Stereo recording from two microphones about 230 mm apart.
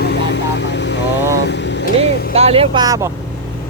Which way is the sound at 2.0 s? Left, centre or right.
Right.